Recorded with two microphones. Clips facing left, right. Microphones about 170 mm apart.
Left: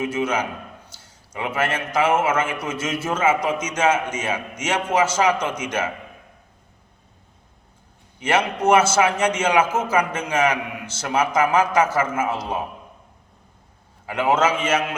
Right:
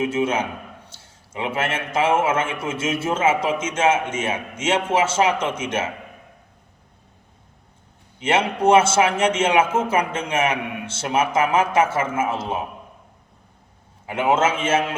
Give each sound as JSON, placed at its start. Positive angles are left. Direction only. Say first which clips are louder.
{"t": 0.0, "sound": "a man's voice", "louder": "right 2 dB", "side_deg": -25}
{"t": 8.2, "sound": "a man's voice", "louder": "right 1 dB", "side_deg": -25}
{"t": 14.1, "sound": "a man's voice", "louder": "even", "side_deg": -25}